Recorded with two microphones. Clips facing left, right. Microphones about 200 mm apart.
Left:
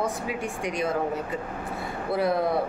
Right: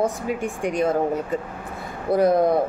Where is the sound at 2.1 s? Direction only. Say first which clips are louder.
Right 7 dB; 45° right (ahead or behind).